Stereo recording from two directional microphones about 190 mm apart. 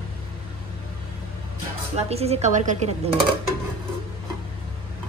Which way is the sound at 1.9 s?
35° right (ahead or behind).